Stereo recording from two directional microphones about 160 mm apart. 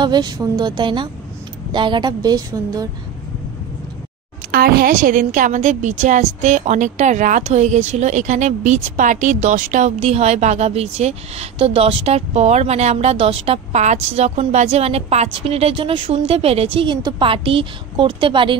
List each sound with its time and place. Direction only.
0.0 s a woman's voice: 25° right (ahead or behind)
4.5 s a woman's voice: 70° right (ahead or behind); by 18.6 s 30° right (ahead or behind)